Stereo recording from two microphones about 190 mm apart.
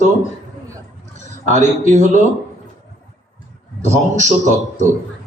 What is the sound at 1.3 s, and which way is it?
Speech, 40° right (ahead or behind).